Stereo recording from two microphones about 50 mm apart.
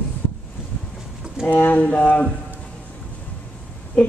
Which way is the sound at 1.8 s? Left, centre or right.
Left.